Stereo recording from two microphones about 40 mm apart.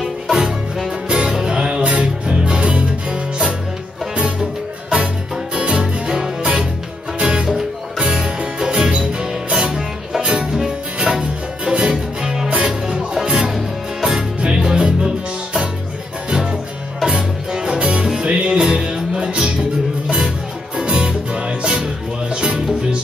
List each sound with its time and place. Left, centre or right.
0.0 s music: centre
5.3 s music: right
11.9 s music: centre
17.5 s music: centre